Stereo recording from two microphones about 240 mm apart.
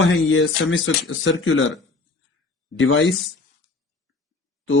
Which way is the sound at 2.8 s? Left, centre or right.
Left.